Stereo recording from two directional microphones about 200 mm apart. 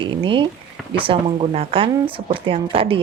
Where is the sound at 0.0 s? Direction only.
25° right (ahead or behind).